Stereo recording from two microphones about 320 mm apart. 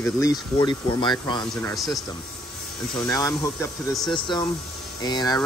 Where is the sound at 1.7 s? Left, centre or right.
Centre.